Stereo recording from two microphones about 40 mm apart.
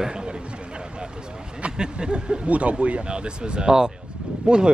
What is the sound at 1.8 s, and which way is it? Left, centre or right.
Speech, right.